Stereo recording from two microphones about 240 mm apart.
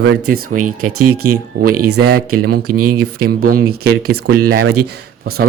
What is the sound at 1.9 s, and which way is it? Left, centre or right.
Speech, right.